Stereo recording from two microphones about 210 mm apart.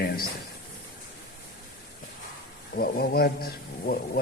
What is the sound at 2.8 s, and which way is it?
Speech, 45° left (ahead or behind).